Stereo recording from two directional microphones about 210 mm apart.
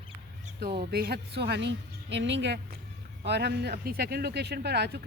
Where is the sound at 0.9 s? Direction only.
45° right (ahead or behind).